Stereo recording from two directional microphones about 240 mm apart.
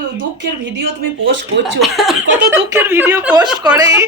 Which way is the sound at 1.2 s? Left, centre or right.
Right.